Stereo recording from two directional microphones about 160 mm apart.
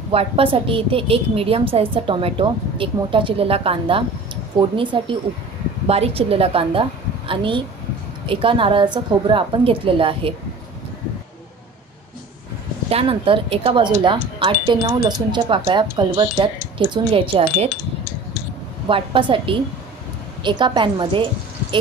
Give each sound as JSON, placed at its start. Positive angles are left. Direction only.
{"t": 0.1, "sound": "a woman's voice", "side_deg": -35}
{"t": 12.9, "sound": "a woman's voice", "side_deg": -35}
{"t": 18.9, "sound": "a woman's voice", "side_deg": -30}